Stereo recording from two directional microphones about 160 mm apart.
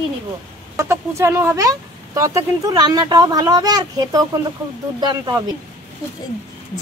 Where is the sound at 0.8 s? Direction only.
15° right (ahead or behind).